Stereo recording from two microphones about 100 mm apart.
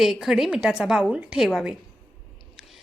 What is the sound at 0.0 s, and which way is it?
A woman's voice, 5° right (ahead or behind).